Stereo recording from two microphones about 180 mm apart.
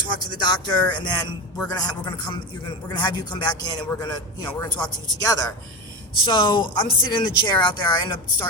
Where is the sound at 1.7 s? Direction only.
20° left (ahead or behind).